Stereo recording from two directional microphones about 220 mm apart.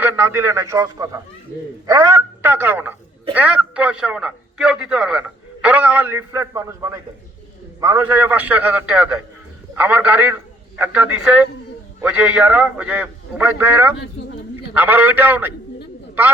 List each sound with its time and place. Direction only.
0.0 s a man's voice: 10° right (ahead or behind)